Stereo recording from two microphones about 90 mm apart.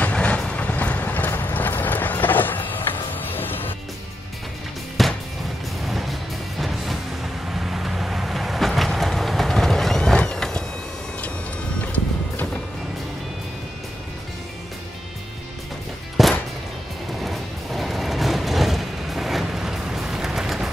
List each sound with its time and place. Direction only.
0.0 s vehicle: 15° left (ahead or behind)
5.0 s music: centre (ahead or behind)
7.4 s vehicle: 5° right (ahead or behind)
11.8 s music: 15° left (ahead or behind)
16.2 s music: centre (ahead or behind)